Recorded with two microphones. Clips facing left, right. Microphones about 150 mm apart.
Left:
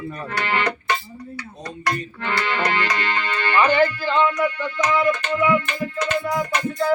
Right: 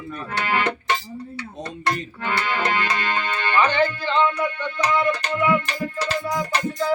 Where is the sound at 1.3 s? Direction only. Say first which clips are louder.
Right 1 dB; 25° right (ahead or behind).